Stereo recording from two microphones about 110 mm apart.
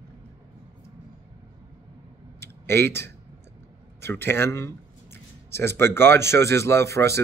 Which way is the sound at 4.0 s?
20° left (ahead or behind).